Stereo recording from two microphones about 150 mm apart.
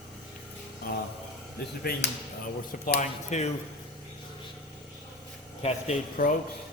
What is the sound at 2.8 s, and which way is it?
Speech, 70° left (ahead or behind).